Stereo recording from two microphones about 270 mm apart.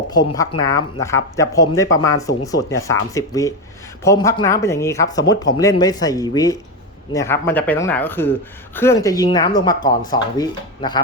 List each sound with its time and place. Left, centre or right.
0.1 s speech: centre